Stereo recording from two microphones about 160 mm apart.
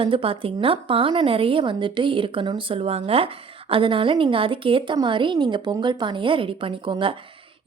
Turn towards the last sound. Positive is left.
turn(degrees=-30)  # may be behind; listen again after turning